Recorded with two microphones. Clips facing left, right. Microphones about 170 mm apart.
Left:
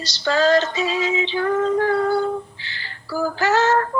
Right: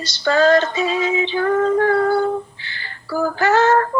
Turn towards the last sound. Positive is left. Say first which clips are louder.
# right 3 dB
turn(degrees=-55)  # may be behind; listen again after turning